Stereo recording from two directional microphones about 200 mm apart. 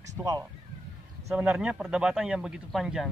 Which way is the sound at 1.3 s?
5° right (ahead or behind).